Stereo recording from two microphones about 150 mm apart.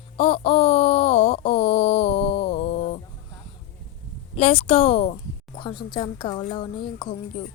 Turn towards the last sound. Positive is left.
turn(degrees=30)  # may be behind; listen again after turning